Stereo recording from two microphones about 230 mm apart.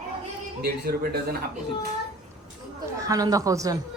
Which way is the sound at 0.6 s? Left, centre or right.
Right.